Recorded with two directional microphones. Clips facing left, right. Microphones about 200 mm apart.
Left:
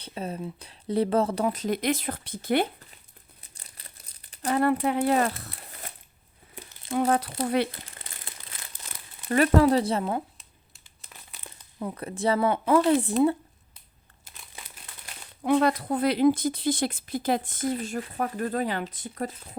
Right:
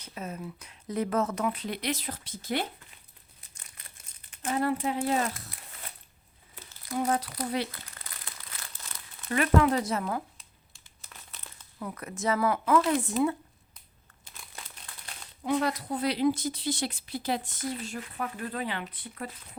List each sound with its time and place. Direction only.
0.0 s speech: 30° left (ahead or behind); by 2.6 s 60° left (ahead or behind)
3.6 s crumpling: 35° left (ahead or behind)
4.4 s speech: 65° left (ahead or behind)
6.9 s speech: 60° left (ahead or behind)
7.7 s crumpling: 30° left (ahead or behind)
9.3 s speech: 35° left (ahead or behind)
11.8 s speech: 30° left (ahead or behind)
14.3 s crumpling: 5° left (ahead or behind)
15.4 s speech: 60° left (ahead or behind)
18.0 s speech: 35° left (ahead or behind)